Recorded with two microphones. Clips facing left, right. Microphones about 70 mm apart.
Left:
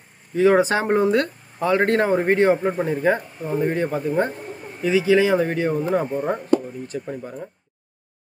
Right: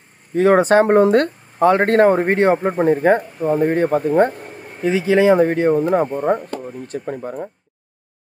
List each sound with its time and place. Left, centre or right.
0.3 s speech: right